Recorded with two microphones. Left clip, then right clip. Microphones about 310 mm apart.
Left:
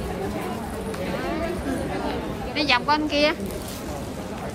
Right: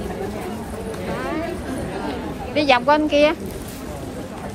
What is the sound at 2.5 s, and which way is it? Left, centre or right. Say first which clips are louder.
Speech: right 5 dB; centre.